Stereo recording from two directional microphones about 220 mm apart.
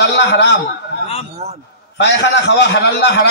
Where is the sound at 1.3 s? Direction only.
30° right (ahead or behind).